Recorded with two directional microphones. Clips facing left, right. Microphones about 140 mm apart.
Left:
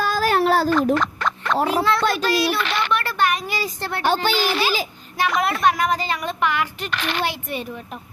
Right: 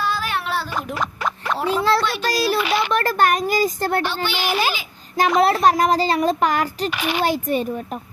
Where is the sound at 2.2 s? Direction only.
40° right (ahead or behind).